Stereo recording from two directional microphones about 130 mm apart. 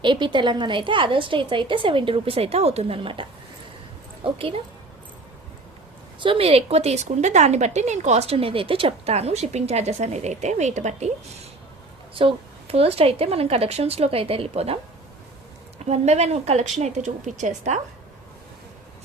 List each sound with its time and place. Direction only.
0.0 s a woman's voice: 35° right (ahead or behind)
6.1 s speech: 40° right (ahead or behind); by 11.1 s 65° right (ahead or behind)
12.1 s a woman's voice: 45° right (ahead or behind)
15.9 s speech: 55° right (ahead or behind)